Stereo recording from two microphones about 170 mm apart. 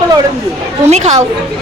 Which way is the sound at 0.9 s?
45° right (ahead or behind).